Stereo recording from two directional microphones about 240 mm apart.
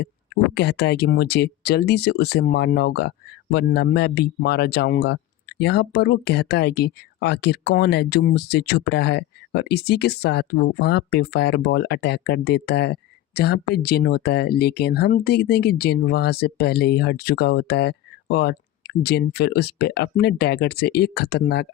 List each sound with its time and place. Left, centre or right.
0.5 s speech: left